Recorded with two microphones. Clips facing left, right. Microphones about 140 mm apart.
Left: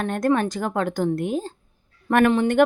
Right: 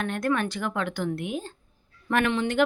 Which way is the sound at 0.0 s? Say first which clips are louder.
Left 5 dB; 40° left (ahead or behind).